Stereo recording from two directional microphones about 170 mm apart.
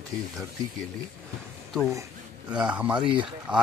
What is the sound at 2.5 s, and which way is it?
Speech, 5° right (ahead or behind).